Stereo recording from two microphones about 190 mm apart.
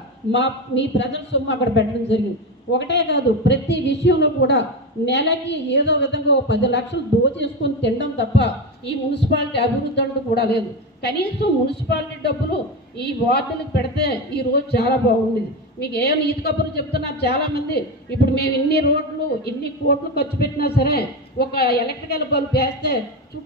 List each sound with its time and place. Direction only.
0.3 s a man's voice: 70° left (ahead or behind)